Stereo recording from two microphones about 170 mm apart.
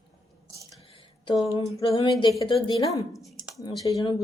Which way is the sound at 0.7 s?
30° left (ahead or behind).